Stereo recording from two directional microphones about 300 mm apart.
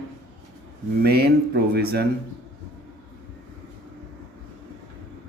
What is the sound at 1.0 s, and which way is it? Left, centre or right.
Speech, right.